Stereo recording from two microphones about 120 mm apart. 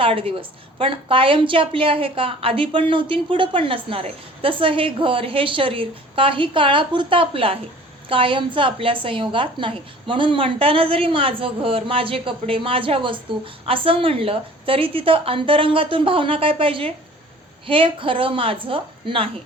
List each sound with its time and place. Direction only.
0.0 s a woman's voice: 50° right (ahead or behind)